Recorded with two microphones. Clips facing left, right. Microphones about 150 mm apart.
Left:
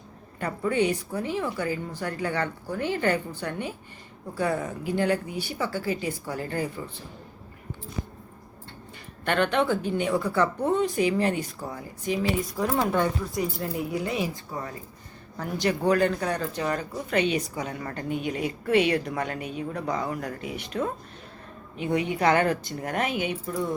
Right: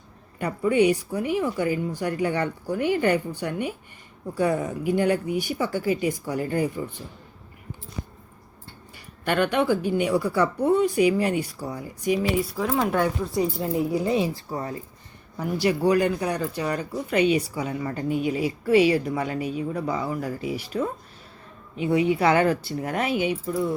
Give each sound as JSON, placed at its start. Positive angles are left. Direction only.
{"t": 0.3, "sound": "speech", "side_deg": -15}
{"t": 9.2, "sound": "speech", "side_deg": -10}
{"t": 12.5, "sound": "a woman's voice", "side_deg": 0}
{"t": 13.3, "sound": "speech", "side_deg": -30}
{"t": 15.4, "sound": "a woman's voice", "side_deg": -10}
{"t": 23.0, "sound": "speech", "side_deg": 50}